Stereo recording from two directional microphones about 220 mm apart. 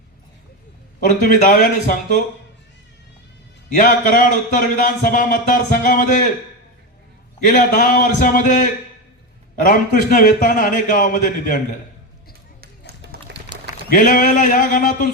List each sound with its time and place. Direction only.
1.0 s speech: 40° left (ahead or behind)
3.8 s speech: 40° left (ahead or behind)
7.4 s speech: 40° left (ahead or behind)
12.6 s a sound: 45° right (ahead or behind)
13.9 s speech: 35° left (ahead or behind)